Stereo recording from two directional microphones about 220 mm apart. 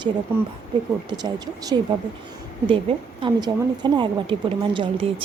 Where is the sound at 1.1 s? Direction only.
20° right (ahead or behind).